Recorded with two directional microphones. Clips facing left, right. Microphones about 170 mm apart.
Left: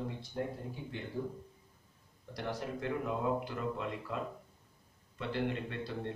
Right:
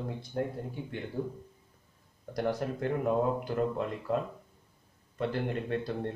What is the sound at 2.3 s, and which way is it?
Speech, 45° right (ahead or behind).